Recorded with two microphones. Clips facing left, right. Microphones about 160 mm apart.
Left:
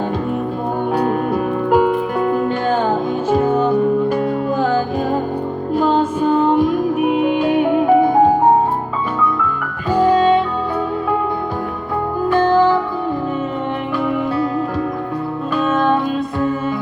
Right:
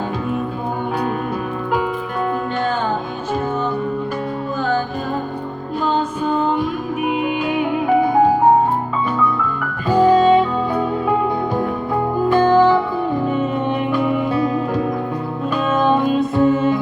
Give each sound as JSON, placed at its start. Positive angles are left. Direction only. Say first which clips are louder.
{"t": 7.1, "sound": "music", "louder": "left 2 dB", "side_deg": 0}
{"t": 9.9, "sound": "music", "louder": "right 1 dB", "side_deg": -10}
{"t": 12.3, "sound": "music", "louder": "even", "side_deg": -10}
{"t": 13.9, "sound": "music", "louder": "left 1 dB", "side_deg": -15}
{"t": 15.5, "sound": "music", "louder": "even", "side_deg": -15}